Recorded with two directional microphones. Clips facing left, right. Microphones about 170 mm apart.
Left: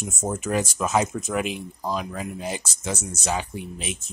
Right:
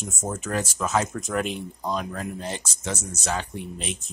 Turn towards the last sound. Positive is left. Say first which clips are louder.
# even
turn(degrees=5)  # may be behind; listen again after turning